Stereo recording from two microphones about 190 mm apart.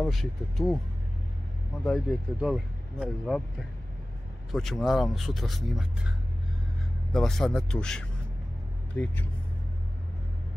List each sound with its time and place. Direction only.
0.0 s speech: centre (ahead or behind)
1.9 s speech: centre (ahead or behind)
4.5 s speech: centre (ahead or behind)